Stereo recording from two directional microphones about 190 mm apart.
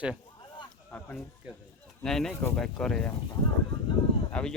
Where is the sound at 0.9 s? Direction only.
10° left (ahead or behind).